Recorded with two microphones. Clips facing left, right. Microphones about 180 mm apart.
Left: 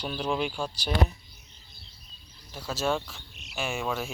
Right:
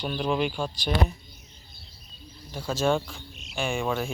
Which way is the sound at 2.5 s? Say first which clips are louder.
Right 4 dB; centre (ahead or behind).